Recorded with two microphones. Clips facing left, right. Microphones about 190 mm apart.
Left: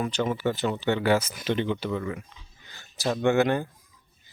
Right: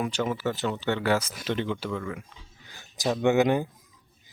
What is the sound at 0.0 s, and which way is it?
Speech, 5° right (ahead or behind).